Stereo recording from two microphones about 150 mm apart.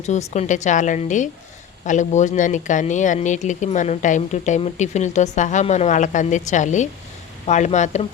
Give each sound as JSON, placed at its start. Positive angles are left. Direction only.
{"t": 0.0, "sound": "a woman's voice", "side_deg": 50}